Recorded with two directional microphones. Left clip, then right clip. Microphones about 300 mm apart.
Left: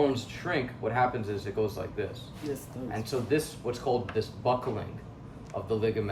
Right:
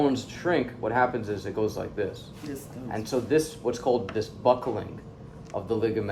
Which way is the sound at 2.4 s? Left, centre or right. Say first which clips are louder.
Left 3 dB; centre.